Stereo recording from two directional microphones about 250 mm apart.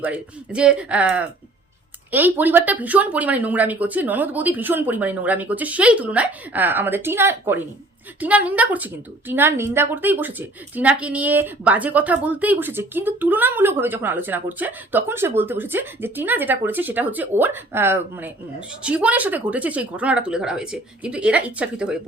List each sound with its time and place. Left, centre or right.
0.0 s a woman's voice: centre